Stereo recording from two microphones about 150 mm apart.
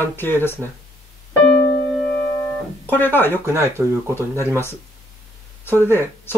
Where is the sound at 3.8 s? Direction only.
15° right (ahead or behind).